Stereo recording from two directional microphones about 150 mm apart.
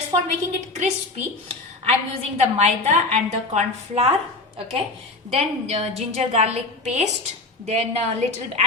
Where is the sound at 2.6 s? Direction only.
50° right (ahead or behind).